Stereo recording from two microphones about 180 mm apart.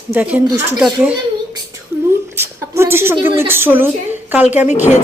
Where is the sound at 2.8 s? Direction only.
15° right (ahead or behind).